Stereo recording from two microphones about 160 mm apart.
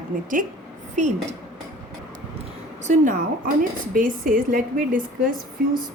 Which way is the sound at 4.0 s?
60° right (ahead or behind).